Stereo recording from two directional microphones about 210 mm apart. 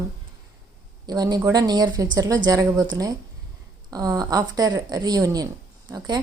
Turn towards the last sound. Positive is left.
turn(degrees=-20)  # may be behind; listen again after turning